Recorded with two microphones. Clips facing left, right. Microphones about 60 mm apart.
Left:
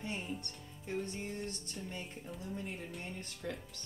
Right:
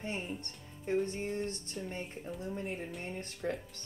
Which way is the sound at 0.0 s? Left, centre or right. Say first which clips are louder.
Right 2 dB; right.